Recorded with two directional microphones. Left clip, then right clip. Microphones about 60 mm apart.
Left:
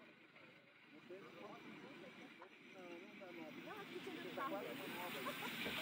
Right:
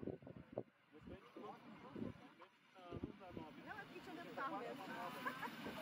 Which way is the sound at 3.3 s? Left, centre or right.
Right.